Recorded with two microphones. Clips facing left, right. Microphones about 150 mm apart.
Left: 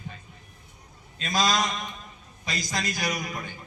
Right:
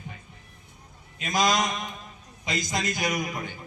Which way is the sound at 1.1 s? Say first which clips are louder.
Right 1 dB; 20° right (ahead or behind).